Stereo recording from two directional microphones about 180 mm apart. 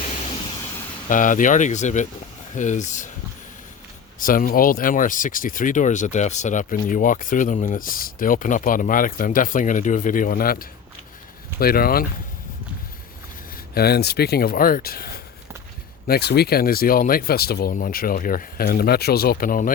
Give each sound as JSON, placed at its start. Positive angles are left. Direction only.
{"t": 1.1, "sound": "speech", "side_deg": 45}
{"t": 4.2, "sound": "speech", "side_deg": 50}
{"t": 13.7, "sound": "speech", "side_deg": 60}